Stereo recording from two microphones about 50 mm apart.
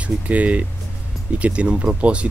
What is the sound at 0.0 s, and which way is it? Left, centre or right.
Speech, right.